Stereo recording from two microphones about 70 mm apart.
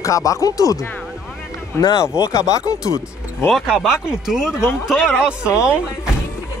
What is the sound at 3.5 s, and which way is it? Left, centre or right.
Speech, centre.